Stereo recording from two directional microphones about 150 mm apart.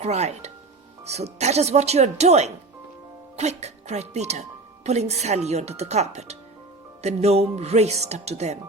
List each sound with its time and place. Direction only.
0.0 s speech: 45° right (ahead or behind)